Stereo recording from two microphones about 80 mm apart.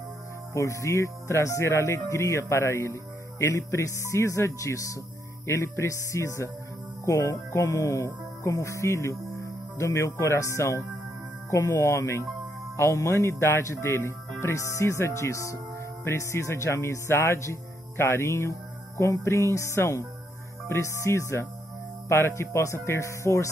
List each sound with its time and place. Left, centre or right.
0.5 s speech: left